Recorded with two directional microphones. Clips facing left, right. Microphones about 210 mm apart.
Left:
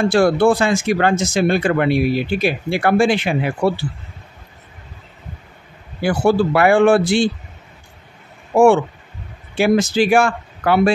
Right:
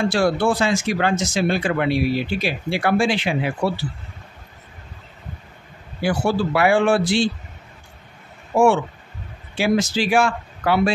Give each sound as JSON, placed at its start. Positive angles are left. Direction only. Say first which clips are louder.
{"t": 0.0, "sound": "speech", "louder": "left 5 dB", "side_deg": 50}
{"t": 6.0, "sound": "speech", "louder": "left 5 dB", "side_deg": 50}
{"t": 9.6, "sound": "speech", "louder": "left 5 dB", "side_deg": 50}